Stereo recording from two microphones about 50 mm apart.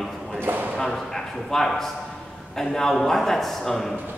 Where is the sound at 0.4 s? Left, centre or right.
Right.